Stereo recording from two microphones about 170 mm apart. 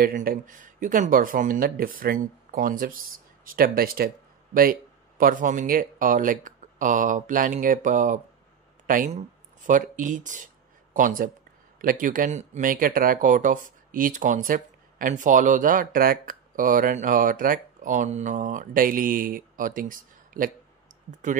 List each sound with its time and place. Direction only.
0.0 s speech: 60° right (ahead or behind)